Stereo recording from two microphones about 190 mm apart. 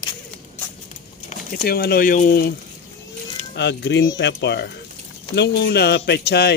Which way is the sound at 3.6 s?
65° left (ahead or behind).